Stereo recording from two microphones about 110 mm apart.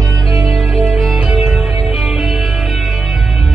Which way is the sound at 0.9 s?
Centre (ahead or behind).